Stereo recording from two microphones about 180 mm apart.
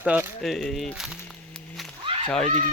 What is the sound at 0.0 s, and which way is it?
Speech, 10° right (ahead or behind).